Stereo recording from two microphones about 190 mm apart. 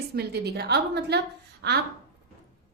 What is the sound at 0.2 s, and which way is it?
A woman's voice, 60° right (ahead or behind).